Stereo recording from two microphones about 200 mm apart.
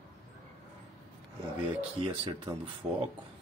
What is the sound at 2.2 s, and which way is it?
Speech, 25° right (ahead or behind).